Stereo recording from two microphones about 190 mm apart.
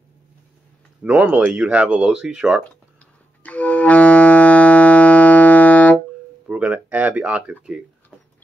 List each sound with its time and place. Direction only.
1.0 s speech: 10° right (ahead or behind)
3.4 s clarinet: 10° left (ahead or behind)
6.4 s a sound: 5° right (ahead or behind)